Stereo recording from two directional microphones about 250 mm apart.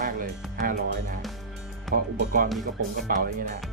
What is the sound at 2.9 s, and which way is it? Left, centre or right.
Speech, right.